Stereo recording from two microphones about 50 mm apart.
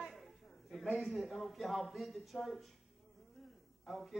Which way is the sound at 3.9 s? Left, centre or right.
Centre.